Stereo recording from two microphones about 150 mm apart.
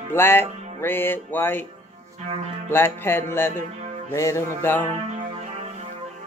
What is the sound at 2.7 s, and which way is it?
Speech, 15° left (ahead or behind).